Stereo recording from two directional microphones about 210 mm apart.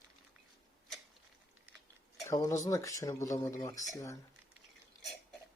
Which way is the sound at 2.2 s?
15° left (ahead or behind).